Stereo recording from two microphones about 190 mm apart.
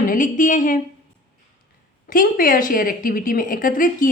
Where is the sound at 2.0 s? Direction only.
45° left (ahead or behind).